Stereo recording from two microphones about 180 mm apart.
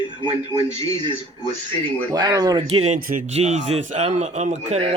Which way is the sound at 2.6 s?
35° right (ahead or behind).